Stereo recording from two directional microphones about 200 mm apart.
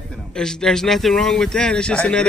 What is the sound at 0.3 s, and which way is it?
A man's voice, 5° left (ahead or behind).